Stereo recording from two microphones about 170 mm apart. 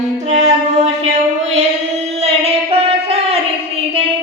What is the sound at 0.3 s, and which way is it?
Music, 40° right (ahead or behind).